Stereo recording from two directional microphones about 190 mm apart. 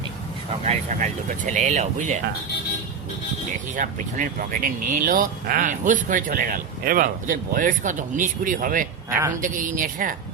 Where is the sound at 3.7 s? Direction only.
40° right (ahead or behind).